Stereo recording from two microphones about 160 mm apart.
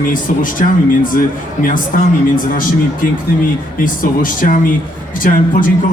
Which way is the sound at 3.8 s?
60° left (ahead or behind).